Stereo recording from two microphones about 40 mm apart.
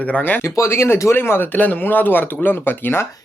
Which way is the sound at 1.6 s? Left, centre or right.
Left.